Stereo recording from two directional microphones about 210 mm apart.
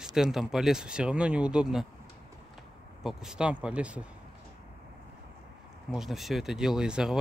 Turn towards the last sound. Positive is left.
turn(degrees=-5)  # may be behind; listen again after turning